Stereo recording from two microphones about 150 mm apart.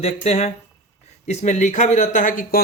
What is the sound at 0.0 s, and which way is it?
Speech, 45° left (ahead or behind).